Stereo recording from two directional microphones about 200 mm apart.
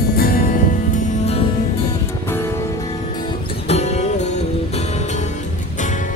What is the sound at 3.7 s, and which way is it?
Music, 35° left (ahead or behind).